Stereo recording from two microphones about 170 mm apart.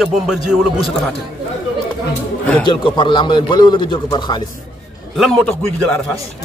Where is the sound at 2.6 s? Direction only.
30° left (ahead or behind).